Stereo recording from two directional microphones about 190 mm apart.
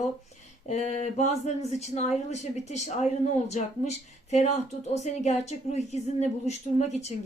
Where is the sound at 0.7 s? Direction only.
40° left (ahead or behind).